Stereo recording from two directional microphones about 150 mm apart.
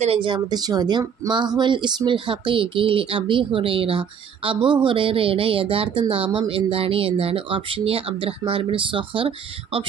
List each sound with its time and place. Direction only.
0.0 s speech: 35° right (ahead or behind)